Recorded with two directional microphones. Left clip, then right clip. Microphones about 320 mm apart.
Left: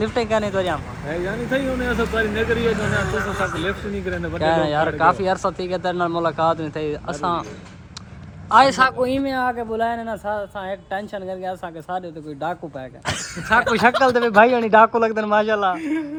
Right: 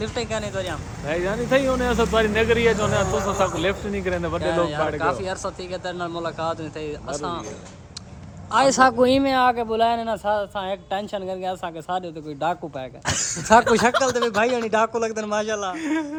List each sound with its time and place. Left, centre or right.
0.0 s speech: centre
1.0 s speech: centre
4.4 s speech: centre
8.4 s a man's voice: centre
9.0 s speech: right
9.2 s speech: centre
13.1 s speech: right
13.7 s speech: centre